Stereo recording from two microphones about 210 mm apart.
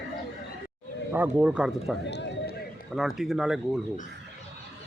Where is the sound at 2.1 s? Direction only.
55° left (ahead or behind).